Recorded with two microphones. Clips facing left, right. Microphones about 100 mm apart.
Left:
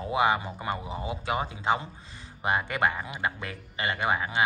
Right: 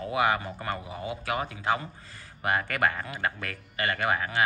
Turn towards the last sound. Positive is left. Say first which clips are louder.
# even
turn(degrees=20)  # may be behind; listen again after turning